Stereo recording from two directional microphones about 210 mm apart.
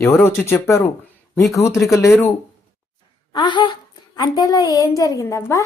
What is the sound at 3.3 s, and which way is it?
Speech, 20° left (ahead or behind).